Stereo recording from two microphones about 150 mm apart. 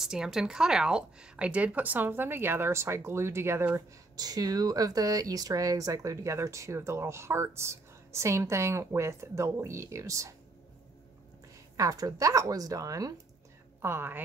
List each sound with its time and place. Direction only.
0.0 s a woman's voice: 5° right (ahead or behind); by 10.3 s 20° right (ahead or behind)
11.7 s a woman's voice: 25° right (ahead or behind)